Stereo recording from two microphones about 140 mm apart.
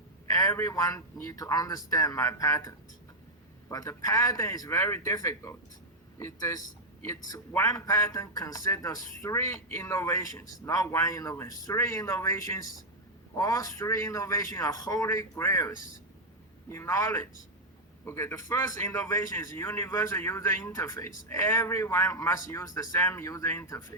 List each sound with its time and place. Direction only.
0.3 s speech: 25° left (ahead or behind)